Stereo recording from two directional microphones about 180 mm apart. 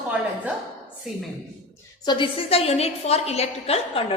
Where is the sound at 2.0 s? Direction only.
25° left (ahead or behind).